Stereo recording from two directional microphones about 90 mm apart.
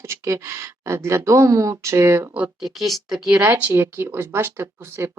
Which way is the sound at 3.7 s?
25° right (ahead or behind).